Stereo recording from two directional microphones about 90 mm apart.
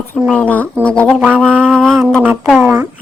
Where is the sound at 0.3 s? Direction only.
15° left (ahead or behind).